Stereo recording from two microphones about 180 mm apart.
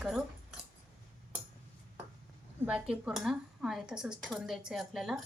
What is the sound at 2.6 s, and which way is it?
Speech, 5° right (ahead or behind).